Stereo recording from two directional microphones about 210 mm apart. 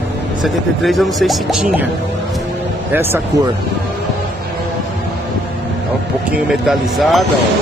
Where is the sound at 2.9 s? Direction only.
10° right (ahead or behind).